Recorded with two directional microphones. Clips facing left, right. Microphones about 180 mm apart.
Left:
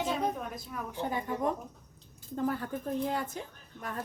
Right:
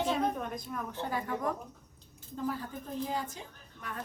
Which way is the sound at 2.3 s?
55° left (ahead or behind).